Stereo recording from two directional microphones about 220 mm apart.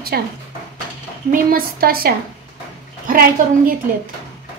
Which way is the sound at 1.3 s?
40° right (ahead or behind).